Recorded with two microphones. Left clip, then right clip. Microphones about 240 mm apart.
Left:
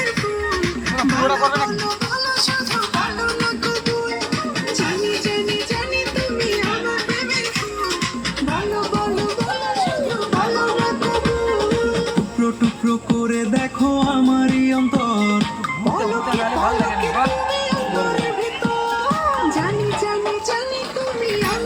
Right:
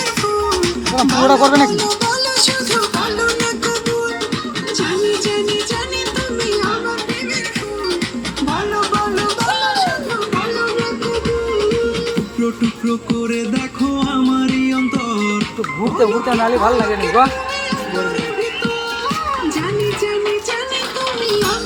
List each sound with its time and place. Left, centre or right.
1.2 s music: right
2.3 s music: centre
11.5 s music: centre
17.0 s speech: centre